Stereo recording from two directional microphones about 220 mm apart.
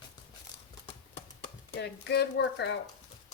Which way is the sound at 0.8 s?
25° left (ahead or behind).